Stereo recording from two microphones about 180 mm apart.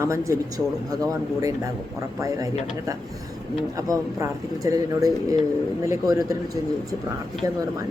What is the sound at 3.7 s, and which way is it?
Speech, 20° right (ahead or behind).